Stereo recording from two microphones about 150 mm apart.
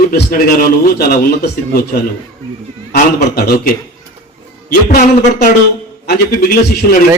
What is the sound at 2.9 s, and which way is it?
Speech, 90° left.